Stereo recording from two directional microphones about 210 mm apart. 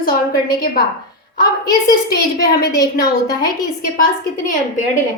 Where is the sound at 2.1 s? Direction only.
50° left (ahead or behind).